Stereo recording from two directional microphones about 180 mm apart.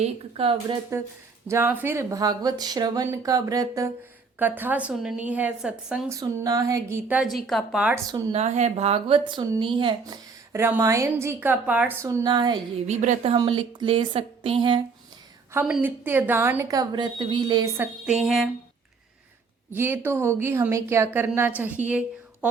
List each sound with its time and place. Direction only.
0.0 s speech: 30° right (ahead or behind)
1.5 s speech: 10° right (ahead or behind)
6.1 s speech: 20° right (ahead or behind); by 7.9 s 5° right (ahead or behind)
8.3 s speech: 40° right (ahead or behind)
10.5 s speech: 15° right (ahead or behind)
12.9 s speech: 40° right (ahead or behind)
13.3 s speech: 30° right (ahead or behind)
15.6 s speech: 5° right (ahead or behind)
18.0 s speech: 5° right (ahead or behind)
19.7 s a woman's voice: 10° right (ahead or behind)